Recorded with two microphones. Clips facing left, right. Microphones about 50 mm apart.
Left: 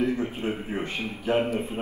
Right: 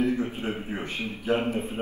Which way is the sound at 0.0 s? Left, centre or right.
Left.